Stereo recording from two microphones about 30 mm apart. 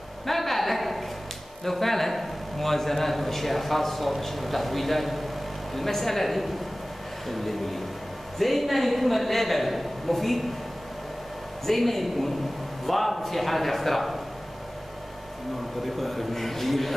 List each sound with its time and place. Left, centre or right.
0.3 s a sound: centre
1.6 s a man's voice: centre
11.6 s a man's voice: centre
15.8 s a man's voice: centre